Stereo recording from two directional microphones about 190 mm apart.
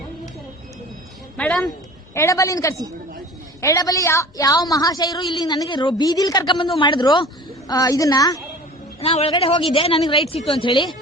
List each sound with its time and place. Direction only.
1.4 s speech: 5° left (ahead or behind)
2.1 s a woman's voice: 15° left (ahead or behind)
9.0 s a woman's voice: 30° left (ahead or behind)